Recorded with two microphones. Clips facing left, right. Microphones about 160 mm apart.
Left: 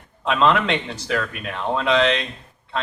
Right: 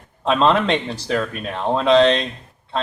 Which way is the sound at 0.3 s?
35° right (ahead or behind).